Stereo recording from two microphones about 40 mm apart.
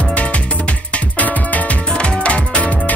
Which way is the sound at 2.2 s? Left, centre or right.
Left.